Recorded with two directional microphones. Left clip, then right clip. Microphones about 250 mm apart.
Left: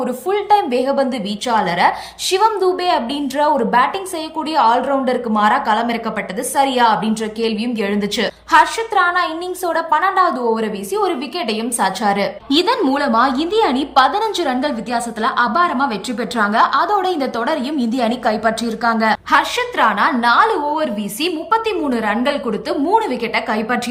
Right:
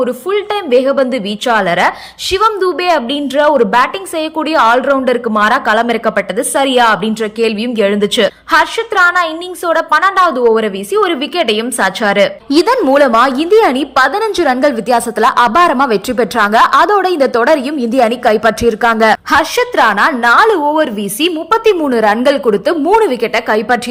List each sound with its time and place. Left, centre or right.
0.0 s a woman's voice: centre
9.6 s a woman's voice: centre